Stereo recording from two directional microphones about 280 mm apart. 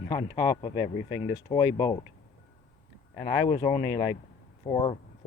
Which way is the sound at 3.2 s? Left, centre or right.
Centre.